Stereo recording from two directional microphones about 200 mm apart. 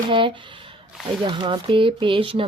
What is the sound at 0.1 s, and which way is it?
Speech, 25° right (ahead or behind).